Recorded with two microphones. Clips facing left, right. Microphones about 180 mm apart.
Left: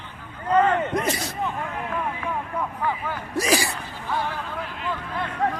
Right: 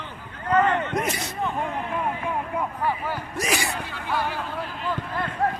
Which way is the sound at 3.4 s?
35° left (ahead or behind).